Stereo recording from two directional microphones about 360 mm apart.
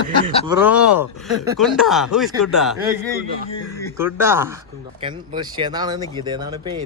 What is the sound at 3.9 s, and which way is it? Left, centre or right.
Speech, centre.